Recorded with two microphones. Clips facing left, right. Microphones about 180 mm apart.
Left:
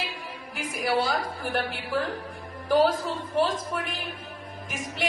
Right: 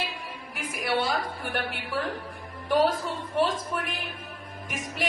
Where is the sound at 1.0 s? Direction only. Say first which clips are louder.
Left 1 dB; centre (ahead or behind).